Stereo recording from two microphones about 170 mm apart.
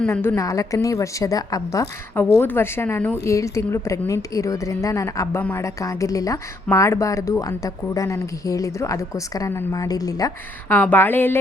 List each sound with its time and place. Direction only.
0.0 s a woman's voice: 15° left (ahead or behind)